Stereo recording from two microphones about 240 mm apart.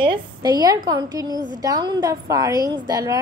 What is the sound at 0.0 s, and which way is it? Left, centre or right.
A woman's voice, centre.